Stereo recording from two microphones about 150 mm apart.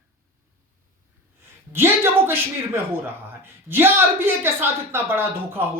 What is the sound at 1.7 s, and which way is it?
A woman's voice, 15° right (ahead or behind).